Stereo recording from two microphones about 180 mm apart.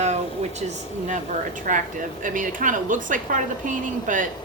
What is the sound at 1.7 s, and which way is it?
A woman's voice, 45° right (ahead or behind).